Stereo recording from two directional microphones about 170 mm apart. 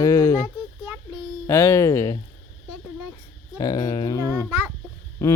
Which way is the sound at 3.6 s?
20° left (ahead or behind).